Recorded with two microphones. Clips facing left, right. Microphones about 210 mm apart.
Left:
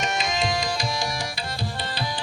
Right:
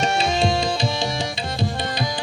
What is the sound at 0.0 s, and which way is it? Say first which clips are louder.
Tabla: right 6 dB; 30° right (ahead or behind).